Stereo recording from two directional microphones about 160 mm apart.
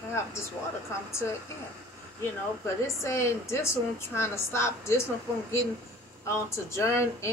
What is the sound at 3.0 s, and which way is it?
A woman's voice, 15° left (ahead or behind).